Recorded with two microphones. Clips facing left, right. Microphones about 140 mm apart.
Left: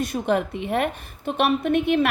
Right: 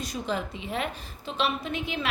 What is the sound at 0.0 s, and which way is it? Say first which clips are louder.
A woman's voice: left 8 dB; 60° left (ahead or behind).